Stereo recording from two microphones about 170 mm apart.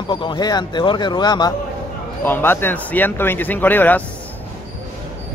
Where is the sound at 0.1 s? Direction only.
30° left (ahead or behind).